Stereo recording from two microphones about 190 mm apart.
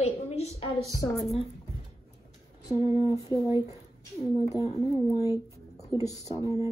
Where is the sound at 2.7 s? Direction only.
15° right (ahead or behind).